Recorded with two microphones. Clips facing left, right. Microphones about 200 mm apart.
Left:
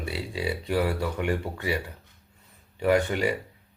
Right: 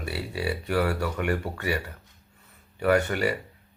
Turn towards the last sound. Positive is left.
turn(degrees=15)  # may be behind; listen again after turning